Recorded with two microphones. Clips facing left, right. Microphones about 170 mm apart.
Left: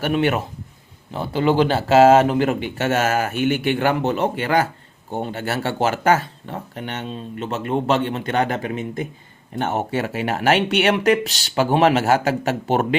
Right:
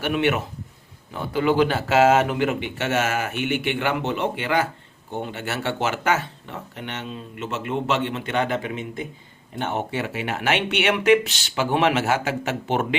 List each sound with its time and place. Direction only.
0.0 s speech: 40° left (ahead or behind)